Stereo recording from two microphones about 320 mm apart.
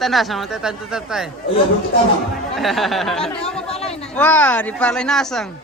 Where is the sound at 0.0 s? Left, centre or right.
Centre.